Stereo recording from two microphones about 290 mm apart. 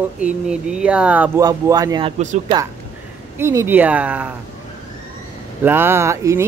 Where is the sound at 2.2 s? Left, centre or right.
Right.